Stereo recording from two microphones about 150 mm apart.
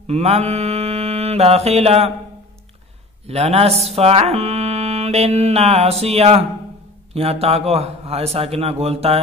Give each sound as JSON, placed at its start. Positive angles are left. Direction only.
{"t": 0.0, "sound": "mantra", "side_deg": -45}
{"t": 3.3, "sound": "speech", "side_deg": -45}